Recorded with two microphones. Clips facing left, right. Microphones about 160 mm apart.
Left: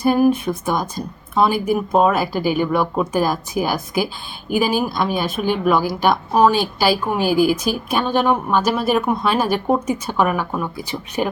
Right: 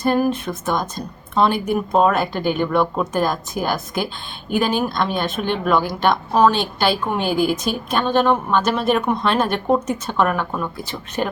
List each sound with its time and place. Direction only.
0.0 s a woman's voice: 10° left (ahead or behind)